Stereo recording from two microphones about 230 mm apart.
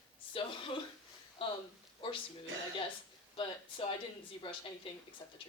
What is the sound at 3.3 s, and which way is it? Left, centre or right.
Speech, left.